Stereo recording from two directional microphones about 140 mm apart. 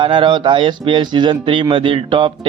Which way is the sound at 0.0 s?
35° right (ahead or behind).